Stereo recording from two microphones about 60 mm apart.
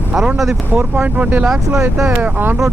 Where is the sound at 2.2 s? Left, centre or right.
Right.